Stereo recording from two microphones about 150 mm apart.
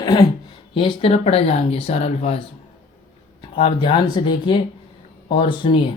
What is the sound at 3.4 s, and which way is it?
Speech, 35° left (ahead or behind).